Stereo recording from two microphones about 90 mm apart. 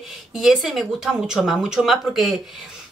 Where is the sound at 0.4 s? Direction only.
Centre (ahead or behind).